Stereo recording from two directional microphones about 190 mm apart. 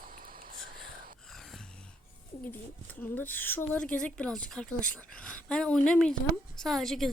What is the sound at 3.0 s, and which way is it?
A woman's voice, 10° left (ahead or behind).